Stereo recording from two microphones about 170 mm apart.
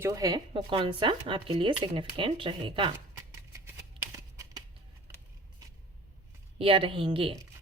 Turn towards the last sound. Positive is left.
turn(degrees=-30)  # may be behind; listen again after turning